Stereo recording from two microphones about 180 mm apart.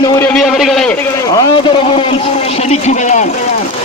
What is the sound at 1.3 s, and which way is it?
A man's voice, 20° left (ahead or behind).